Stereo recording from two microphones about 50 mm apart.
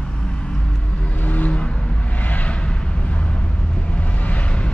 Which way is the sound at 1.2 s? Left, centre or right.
Left.